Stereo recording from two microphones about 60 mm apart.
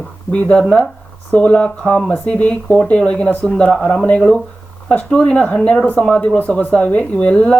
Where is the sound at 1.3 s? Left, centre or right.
Left.